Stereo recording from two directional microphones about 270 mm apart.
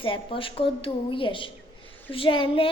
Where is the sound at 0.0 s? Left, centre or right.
Centre.